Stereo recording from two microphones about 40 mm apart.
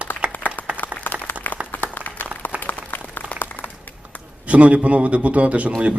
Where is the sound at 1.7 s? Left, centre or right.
Left.